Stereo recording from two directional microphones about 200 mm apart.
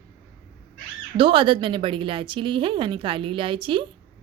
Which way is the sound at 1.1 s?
25° right (ahead or behind).